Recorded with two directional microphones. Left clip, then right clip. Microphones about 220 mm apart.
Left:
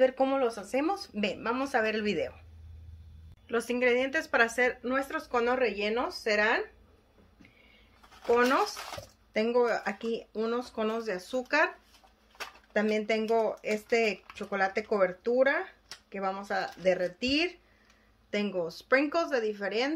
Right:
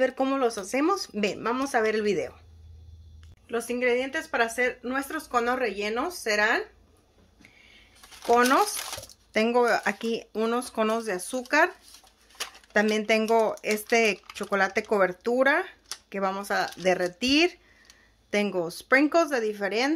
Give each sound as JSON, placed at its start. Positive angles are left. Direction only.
{"t": 0.0, "sound": "speech", "side_deg": -35}
{"t": 3.4, "sound": "speech", "side_deg": -5}
{"t": 4.9, "sound": "speech", "side_deg": -25}
{"t": 8.3, "sound": "speech", "side_deg": -35}
{"t": 12.7, "sound": "speech", "side_deg": -40}